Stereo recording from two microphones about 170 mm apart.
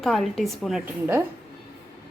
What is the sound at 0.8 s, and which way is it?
Speech, 10° right (ahead or behind).